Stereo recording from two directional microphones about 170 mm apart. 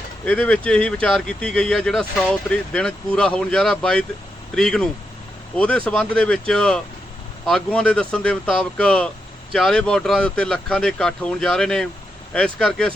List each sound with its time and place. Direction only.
0.3 s speech: 5° left (ahead or behind)